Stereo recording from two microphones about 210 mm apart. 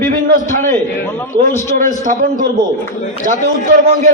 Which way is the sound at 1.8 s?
40° right (ahead or behind).